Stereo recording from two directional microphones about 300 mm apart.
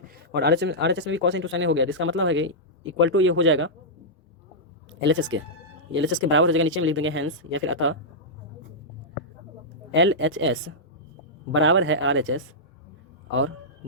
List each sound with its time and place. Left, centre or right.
0.3 s speech: right
4.9 s speech: right
9.9 s speech: right